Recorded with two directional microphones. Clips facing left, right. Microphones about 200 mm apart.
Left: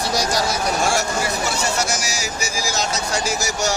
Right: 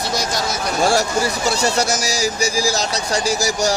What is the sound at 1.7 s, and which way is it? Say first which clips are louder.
Speech: right 4 dB; 35° right (ahead or behind).